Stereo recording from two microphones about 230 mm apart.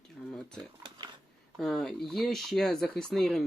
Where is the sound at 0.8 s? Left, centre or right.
Centre.